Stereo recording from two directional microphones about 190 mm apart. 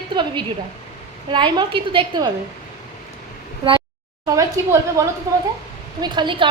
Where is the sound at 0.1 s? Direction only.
25° right (ahead or behind).